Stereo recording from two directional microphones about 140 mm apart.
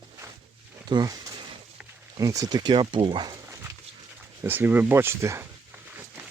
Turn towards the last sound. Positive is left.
turn(degrees=-20)  # may be behind; listen again after turning